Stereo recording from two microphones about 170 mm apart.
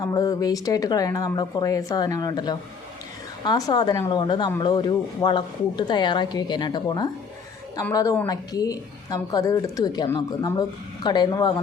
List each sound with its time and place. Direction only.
0.0 s speech: 20° left (ahead or behind)